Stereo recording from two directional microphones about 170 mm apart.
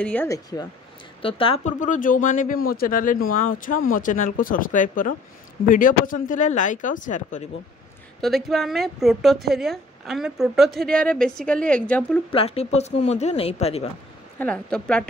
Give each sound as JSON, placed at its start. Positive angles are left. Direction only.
{"t": 0.0, "sound": "speech", "side_deg": 10}
{"t": 1.2, "sound": "speech", "side_deg": 30}
{"t": 1.6, "sound": "speech", "side_deg": 45}
{"t": 8.2, "sound": "speech", "side_deg": 0}
{"t": 12.3, "sound": "speech", "side_deg": 35}
{"t": 14.4, "sound": "speech", "side_deg": 5}